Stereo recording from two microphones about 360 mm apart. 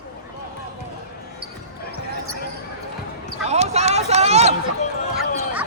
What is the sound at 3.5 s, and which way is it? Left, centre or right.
Speech, centre.